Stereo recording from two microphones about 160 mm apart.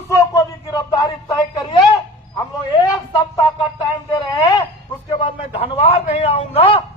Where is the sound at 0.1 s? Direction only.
20° left (ahead or behind).